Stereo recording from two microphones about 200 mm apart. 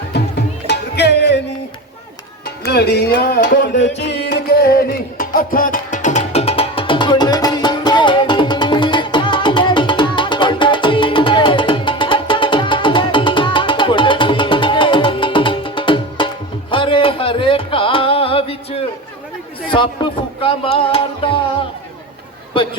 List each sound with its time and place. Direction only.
0.7 s music: 55° left (ahead or behind)
2.6 s music: 55° left (ahead or behind); by 21.0 s 30° left (ahead or behind)